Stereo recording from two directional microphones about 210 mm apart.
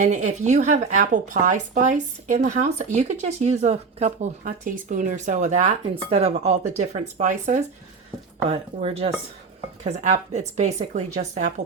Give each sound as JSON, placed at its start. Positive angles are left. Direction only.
{"t": 0.0, "sound": "speech", "side_deg": -35}